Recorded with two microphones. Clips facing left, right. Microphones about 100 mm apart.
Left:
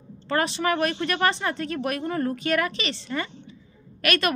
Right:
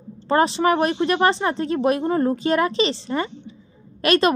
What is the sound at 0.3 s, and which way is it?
Speech, 30° right (ahead or behind).